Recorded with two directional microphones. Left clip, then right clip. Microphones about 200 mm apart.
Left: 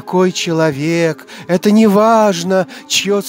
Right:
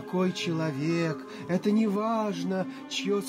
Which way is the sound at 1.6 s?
50° left (ahead or behind).